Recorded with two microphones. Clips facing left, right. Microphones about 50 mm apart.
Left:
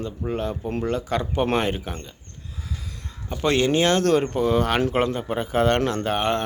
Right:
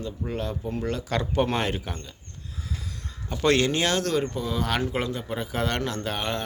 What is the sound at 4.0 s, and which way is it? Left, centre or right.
Speech, left.